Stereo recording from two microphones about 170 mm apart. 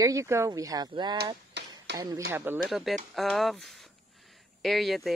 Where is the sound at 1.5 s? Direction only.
85° right.